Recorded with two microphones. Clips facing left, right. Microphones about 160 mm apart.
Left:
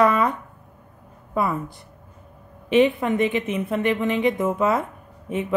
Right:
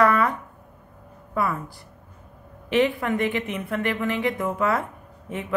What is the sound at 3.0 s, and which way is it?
A woman's voice, 20° left (ahead or behind).